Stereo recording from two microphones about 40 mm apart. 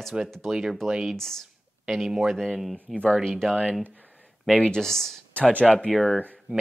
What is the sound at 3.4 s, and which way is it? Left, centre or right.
Speech, centre.